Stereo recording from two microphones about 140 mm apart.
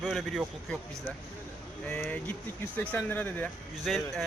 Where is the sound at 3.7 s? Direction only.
Centre (ahead or behind).